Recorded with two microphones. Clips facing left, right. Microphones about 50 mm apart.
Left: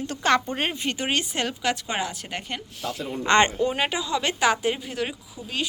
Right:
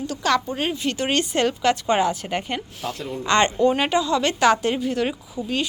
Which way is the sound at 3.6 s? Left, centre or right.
Centre.